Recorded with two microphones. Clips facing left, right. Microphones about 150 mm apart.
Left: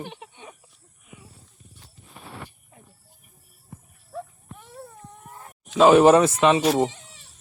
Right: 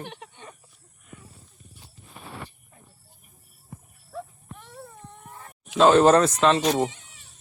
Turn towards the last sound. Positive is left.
turn(degrees=5)  # may be behind; listen again after turning